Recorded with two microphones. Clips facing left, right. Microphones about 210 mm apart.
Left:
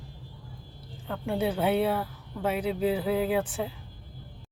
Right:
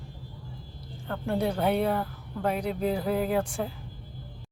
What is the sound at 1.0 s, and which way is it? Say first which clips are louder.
Speech: even; 5° left (ahead or behind).